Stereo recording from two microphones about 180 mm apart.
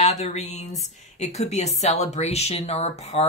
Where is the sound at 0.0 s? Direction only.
40° left (ahead or behind).